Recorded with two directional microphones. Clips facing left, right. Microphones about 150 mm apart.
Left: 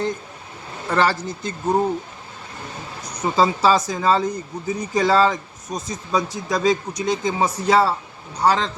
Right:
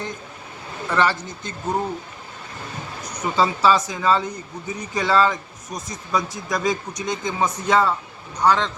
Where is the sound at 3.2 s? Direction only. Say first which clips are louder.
Left 1 dB; 35° left (ahead or behind).